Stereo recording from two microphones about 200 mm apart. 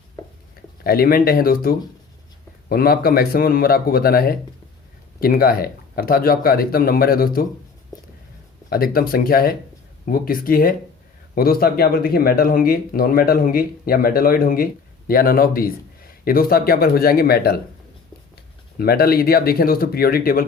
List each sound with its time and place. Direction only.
0.9 s speech: 50° left (ahead or behind)
8.7 s speech: 50° left (ahead or behind)
18.8 s speech: 50° left (ahead or behind)